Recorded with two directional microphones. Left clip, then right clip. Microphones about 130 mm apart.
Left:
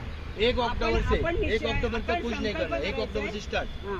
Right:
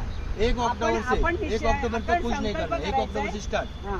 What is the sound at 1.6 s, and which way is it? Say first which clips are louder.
Speech: right 4 dB; 45° right (ahead or behind).